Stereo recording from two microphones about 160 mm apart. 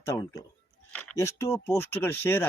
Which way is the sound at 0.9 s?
5° left (ahead or behind).